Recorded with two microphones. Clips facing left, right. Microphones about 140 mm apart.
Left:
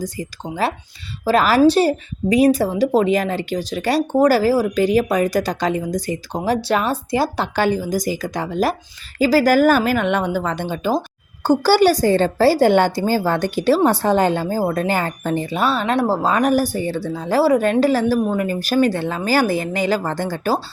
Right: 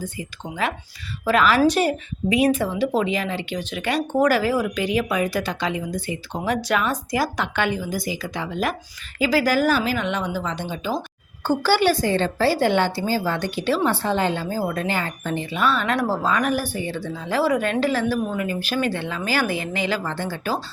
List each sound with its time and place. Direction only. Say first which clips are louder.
0.0 s a woman's voice: left 5 dB; 35° left (ahead or behind)
11.4 s a woman's voice: left 5 dB; 40° left (ahead or behind)